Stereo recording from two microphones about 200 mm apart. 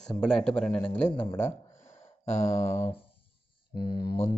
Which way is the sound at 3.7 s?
50° left (ahead or behind).